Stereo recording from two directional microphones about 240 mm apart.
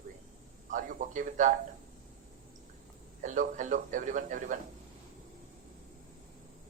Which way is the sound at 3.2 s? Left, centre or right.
Right.